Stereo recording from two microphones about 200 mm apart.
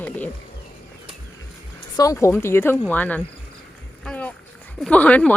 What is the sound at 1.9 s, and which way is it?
Speech, 15° left (ahead or behind).